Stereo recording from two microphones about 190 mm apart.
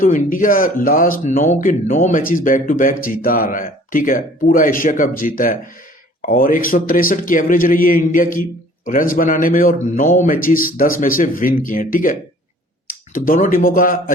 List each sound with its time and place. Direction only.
0.0 s speech: 45° left (ahead or behind)